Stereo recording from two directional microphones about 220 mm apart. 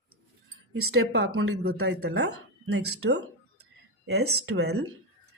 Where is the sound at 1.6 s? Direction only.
45° right (ahead or behind).